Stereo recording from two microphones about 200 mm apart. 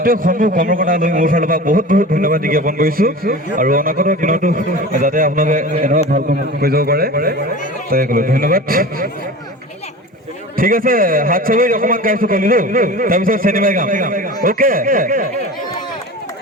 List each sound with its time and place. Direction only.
0.0 s a man's voice: 45° right (ahead or behind)
10.6 s a man's voice: 45° right (ahead or behind)